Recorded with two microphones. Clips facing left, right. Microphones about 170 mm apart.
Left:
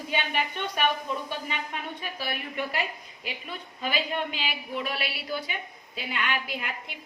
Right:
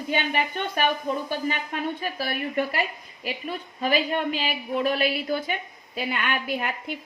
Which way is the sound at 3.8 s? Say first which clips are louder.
Right 6 dB; 45° right (ahead or behind).